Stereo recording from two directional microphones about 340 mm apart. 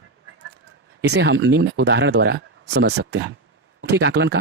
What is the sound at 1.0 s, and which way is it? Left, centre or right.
A man's voice, right.